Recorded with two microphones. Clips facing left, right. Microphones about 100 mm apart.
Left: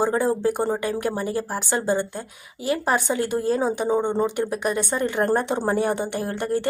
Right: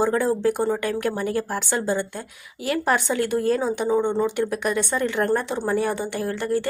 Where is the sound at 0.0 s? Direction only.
15° left (ahead or behind).